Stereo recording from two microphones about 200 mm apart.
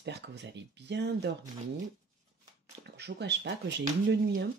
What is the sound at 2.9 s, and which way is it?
Speech, 60° right (ahead or behind).